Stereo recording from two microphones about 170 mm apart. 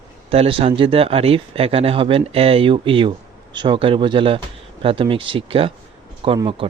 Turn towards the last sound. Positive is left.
turn(degrees=-30)  # may be behind; listen again after turning